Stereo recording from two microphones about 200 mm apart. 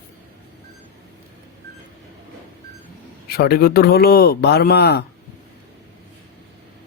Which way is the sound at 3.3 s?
50° left (ahead or behind).